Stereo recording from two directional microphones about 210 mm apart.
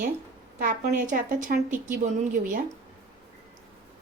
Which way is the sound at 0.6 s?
40° right (ahead or behind).